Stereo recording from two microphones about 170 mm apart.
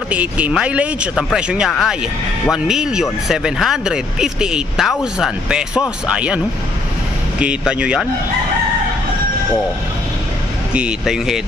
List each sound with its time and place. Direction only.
0.1 s speech: 10° right (ahead or behind)
10.7 s speech: 5° right (ahead or behind)